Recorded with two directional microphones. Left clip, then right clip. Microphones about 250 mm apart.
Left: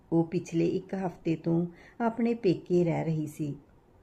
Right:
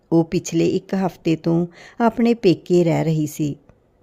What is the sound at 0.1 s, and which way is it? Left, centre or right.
Speech, right.